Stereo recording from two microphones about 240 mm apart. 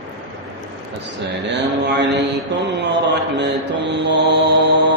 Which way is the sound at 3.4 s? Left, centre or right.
Right.